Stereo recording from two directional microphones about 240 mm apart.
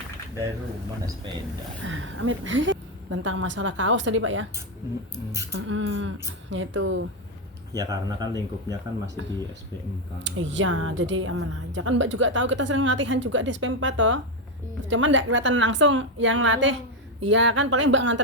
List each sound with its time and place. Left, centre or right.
1.8 s a woman's voice: right
5.5 s a woman's voice: right
7.8 s speech: centre
9.2 s a woman's voice: right